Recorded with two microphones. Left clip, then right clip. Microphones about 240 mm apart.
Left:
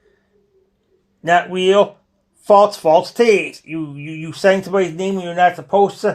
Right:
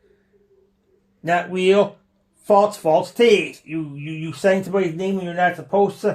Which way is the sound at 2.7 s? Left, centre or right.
Centre.